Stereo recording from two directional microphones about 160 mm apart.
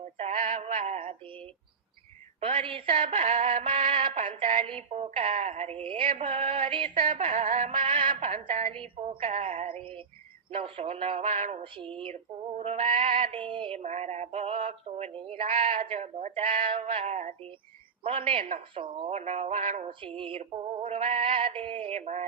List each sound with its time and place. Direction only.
0.0 s a sound: 45° right (ahead or behind)
2.4 s female singing: 35° right (ahead or behind); by 3.6 s 50° right (ahead or behind)
3.8 s music: 35° right (ahead or behind)
4.6 s female singing: 40° right (ahead or behind)
7.2 s music: 50° right (ahead or behind)
8.3 s a woman's voice: 50° right (ahead or behind)
8.7 s female singing: 35° right (ahead or behind)
11.6 s female singing: 35° right (ahead or behind)
12.1 s female singing: 45° right (ahead or behind)
15.5 s speech: 55° right (ahead or behind)
15.9 s female singing: 40° right (ahead or behind)
19.2 s music: 45° right (ahead or behind)
20.1 s female singing: 35° right (ahead or behind)